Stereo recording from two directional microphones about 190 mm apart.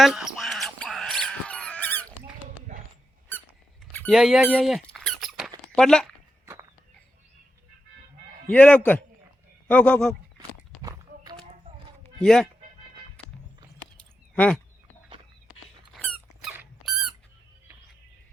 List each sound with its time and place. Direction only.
0.0 s a sound: centre (ahead or behind)
3.9 s squeak: 5° left (ahead or behind)
5.7 s speech: centre (ahead or behind)
6.4 s walk: 15° right (ahead or behind)
8.4 s a man's voice: 5° left (ahead or behind)
10.8 s a sound: 20° right (ahead or behind)
12.2 s speech: centre (ahead or behind)
14.3 s a man's voice: 5° left (ahead or behind)
16.0 s squeak: 5° left (ahead or behind)